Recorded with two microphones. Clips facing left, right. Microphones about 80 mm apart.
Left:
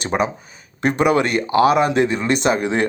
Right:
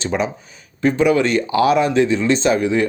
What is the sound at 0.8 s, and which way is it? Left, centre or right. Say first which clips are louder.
Speech: right 1 dB; left.